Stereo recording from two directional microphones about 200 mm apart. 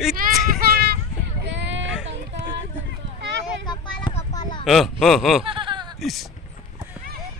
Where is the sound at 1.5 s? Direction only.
60° right (ahead or behind).